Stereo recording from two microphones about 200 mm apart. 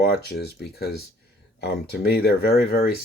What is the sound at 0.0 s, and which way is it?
Speech, 50° left (ahead or behind).